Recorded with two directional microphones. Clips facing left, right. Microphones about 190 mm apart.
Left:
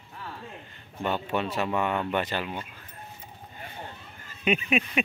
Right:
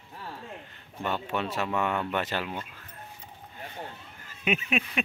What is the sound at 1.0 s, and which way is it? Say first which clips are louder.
A man's voice: left 2 dB; 5° left (ahead or behind).